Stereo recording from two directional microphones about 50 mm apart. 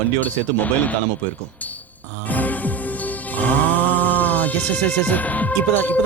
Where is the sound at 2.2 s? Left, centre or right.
Left.